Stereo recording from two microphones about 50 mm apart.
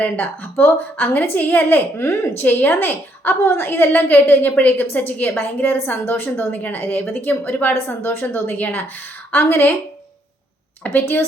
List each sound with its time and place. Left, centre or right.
0.0 s a woman's voice: left
2.0 s a woman's voice: left
2.5 s a woman's voice: left
6.7 s a woman's voice: left
10.8 s a woman's voice: left